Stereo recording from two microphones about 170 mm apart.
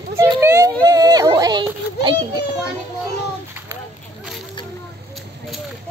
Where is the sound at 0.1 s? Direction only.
15° right (ahead or behind).